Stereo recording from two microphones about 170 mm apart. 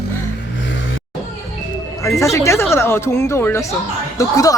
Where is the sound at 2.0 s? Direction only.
20° left (ahead or behind).